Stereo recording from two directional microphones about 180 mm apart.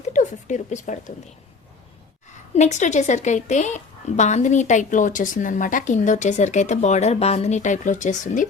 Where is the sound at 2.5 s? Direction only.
40° left (ahead or behind).